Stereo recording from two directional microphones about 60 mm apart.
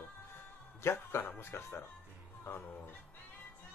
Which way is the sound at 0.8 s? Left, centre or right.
Left.